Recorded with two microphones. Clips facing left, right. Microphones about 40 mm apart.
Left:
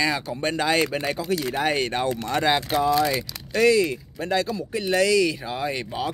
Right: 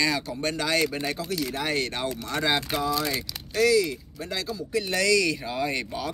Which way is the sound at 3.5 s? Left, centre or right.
Left.